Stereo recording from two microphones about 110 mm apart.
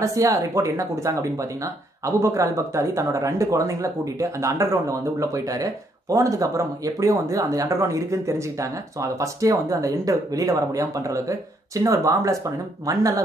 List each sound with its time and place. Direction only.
0.0 s speech: 30° right (ahead or behind)